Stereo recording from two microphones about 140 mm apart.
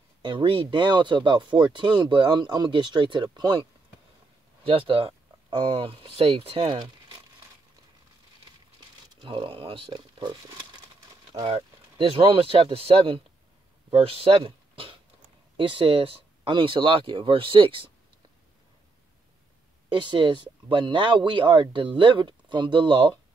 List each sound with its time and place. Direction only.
0.2 s speech: 35° right (ahead or behind)
4.6 s speech: 40° right (ahead or behind)
9.2 s speech: 40° right (ahead or behind)
20.0 s speech: 35° right (ahead or behind)